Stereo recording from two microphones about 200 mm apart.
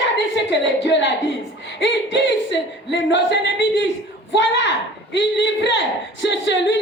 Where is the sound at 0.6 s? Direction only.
65° left (ahead or behind).